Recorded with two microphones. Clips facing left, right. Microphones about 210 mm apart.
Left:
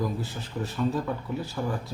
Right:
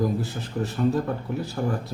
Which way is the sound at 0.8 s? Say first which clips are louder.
Right 4 dB; 50° right (ahead or behind).